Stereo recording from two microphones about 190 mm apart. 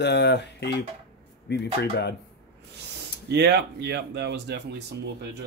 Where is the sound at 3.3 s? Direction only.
60° right (ahead or behind).